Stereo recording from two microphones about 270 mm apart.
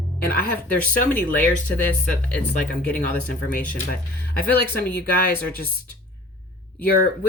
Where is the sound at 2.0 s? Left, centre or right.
Centre.